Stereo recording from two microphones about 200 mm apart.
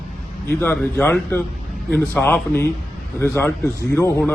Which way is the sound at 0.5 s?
10° left (ahead or behind).